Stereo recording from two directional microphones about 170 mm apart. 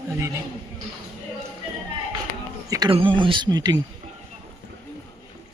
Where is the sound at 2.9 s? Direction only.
30° right (ahead or behind).